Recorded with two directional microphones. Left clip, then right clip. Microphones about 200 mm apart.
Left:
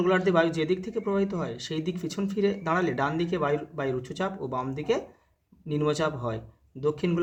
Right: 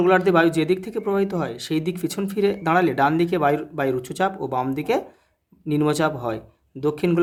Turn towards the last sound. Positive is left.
turn(degrees=-35)  # may be behind; listen again after turning